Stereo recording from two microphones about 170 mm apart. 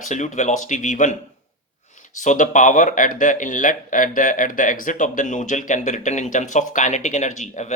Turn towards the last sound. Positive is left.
turn(degrees=45)  # may be behind; listen again after turning